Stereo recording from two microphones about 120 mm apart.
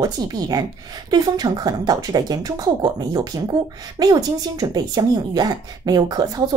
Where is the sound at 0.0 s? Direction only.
30° right (ahead or behind).